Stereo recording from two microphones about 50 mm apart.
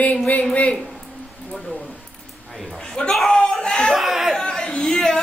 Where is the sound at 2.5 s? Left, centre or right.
Centre.